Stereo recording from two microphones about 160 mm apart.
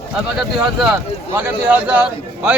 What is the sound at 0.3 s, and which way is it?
A man's voice, 5° right (ahead or behind).